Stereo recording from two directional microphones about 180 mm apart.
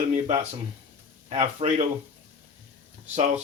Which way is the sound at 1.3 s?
35° right (ahead or behind).